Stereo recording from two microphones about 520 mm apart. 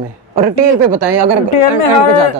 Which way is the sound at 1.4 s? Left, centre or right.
Left.